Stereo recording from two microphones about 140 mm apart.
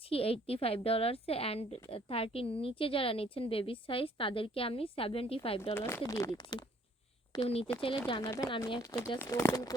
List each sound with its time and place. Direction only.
0.1 s a woman's voice: 45° left (ahead or behind)
5.7 s speech: 15° left (ahead or behind)
7.4 s a woman's voice: 45° left (ahead or behind)
8.2 s speech: 20° left (ahead or behind)